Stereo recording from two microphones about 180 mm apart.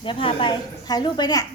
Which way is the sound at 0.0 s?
30° left (ahead or behind).